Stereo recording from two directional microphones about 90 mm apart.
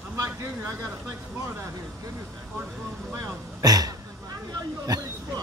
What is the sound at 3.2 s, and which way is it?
Speech, 45° right (ahead or behind).